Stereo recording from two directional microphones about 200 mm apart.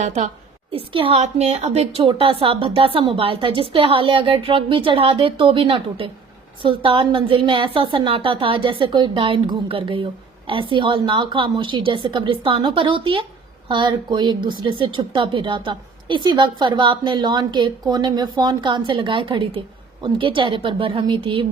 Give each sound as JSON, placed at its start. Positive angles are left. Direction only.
{"t": 0.0, "sound": "a woman's voice", "side_deg": -35}